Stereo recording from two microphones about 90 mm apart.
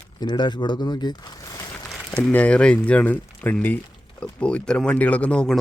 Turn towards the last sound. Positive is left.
turn(degrees=10)  # may be behind; listen again after turning